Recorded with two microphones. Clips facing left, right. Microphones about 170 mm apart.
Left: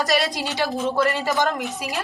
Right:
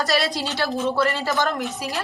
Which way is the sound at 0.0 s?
15° left (ahead or behind).